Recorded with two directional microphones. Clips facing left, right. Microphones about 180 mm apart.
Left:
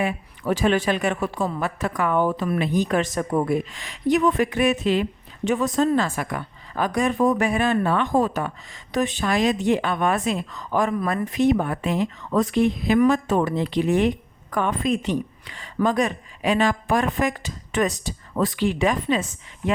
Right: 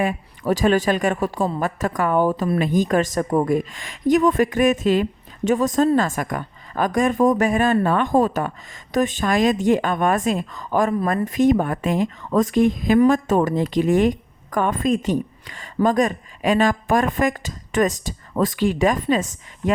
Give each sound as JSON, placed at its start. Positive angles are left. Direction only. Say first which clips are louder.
{"t": 0.0, "sound": "a woman's voice", "louder": "right 3 dB", "side_deg": -45}